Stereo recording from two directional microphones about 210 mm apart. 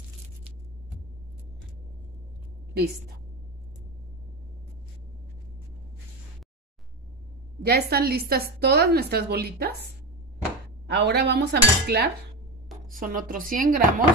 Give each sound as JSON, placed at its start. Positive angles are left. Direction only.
{"t": 7.6, "sound": "a woman's voice", "side_deg": -50}
{"t": 10.9, "sound": "a woman's voice", "side_deg": -50}